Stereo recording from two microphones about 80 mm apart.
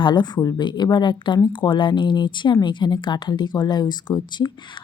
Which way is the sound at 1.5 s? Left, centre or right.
Left.